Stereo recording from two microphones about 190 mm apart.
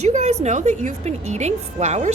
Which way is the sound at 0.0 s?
35° right (ahead or behind).